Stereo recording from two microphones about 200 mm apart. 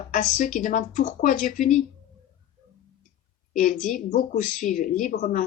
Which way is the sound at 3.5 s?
40° left (ahead or behind).